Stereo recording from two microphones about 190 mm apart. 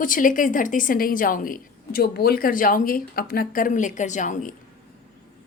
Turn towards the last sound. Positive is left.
turn(degrees=40)  # may be behind; listen again after turning